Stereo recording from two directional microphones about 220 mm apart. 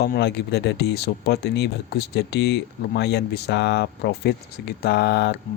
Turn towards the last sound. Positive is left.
turn(degrees=50)  # may be behind; listen again after turning